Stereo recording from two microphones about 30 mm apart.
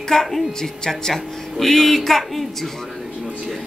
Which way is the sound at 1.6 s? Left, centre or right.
Centre.